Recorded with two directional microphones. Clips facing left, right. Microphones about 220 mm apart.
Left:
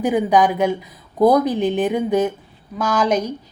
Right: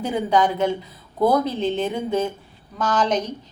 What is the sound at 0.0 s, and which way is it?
Speech, 15° left (ahead or behind).